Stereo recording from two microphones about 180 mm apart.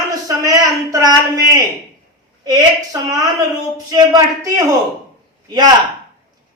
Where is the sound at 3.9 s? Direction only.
20° right (ahead or behind).